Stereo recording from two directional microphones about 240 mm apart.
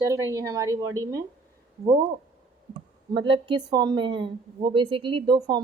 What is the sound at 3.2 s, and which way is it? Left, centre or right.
A woman's voice, right.